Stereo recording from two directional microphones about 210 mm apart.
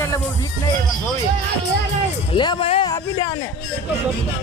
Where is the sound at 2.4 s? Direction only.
25° left (ahead or behind).